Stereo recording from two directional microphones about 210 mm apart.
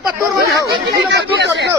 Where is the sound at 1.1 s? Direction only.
55° right (ahead or behind).